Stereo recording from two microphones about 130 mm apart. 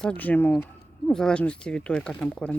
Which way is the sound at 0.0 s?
10° left (ahead or behind).